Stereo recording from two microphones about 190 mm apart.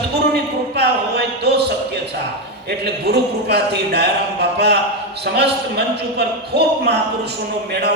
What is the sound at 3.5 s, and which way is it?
Speech, 60° right (ahead or behind).